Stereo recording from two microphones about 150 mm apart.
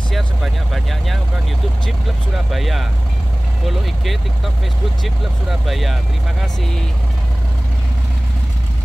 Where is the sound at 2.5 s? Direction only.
Centre (ahead or behind).